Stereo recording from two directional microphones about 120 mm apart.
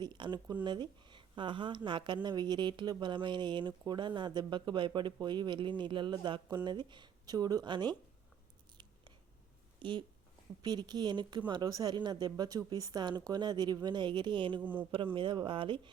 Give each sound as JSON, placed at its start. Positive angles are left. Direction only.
{"t": 0.0, "sound": "speech", "side_deg": -40}
{"t": 9.8, "sound": "speech", "side_deg": -45}
{"t": 14.6, "sound": "speech", "side_deg": -15}
{"t": 14.9, "sound": "speech", "side_deg": -45}